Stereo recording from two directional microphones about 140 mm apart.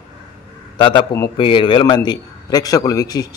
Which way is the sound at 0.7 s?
35° left (ahead or behind).